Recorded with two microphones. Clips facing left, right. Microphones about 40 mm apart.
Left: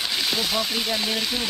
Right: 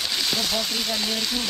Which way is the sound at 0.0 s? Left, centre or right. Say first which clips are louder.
Left 1 dB; centre.